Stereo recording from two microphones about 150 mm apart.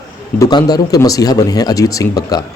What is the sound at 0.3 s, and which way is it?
A man's voice, 25° left (ahead or behind).